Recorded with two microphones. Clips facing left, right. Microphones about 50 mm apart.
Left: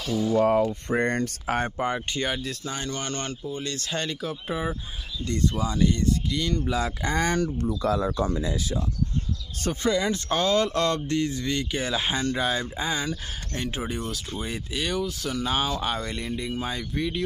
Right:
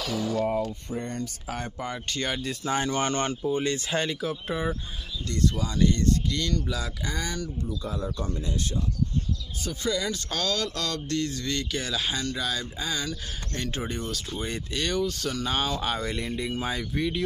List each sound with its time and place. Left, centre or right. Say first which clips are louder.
0.3 s speech: left 7 dB; left
0.8 s speech: left 8 dB; left
1.8 s speech: left 6 dB; left
2.1 s speech: left 2 dB; centre
2.6 s speech: right 5 dB; centre
5.2 s speech: left 1 dB; left
5.8 s speech: right 1 dB; centre
6.6 s speech: left 5 dB; left
7.8 s speech: left 11 dB; left
9.8 s speech: left 4 dB; left
13.6 s speech: left 1 dB; centre